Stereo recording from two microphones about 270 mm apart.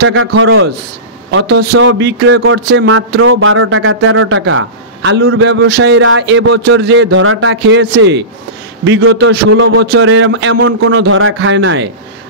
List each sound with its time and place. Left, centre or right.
0.1 s a man's voice: right